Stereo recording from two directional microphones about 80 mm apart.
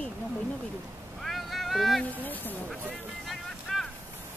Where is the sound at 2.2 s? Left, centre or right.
Left.